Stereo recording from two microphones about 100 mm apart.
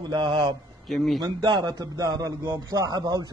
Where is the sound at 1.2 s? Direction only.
45° right (ahead or behind).